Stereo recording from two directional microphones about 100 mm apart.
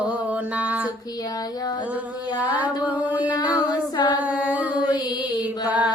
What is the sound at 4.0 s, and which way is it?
A capella, 50° left (ahead or behind).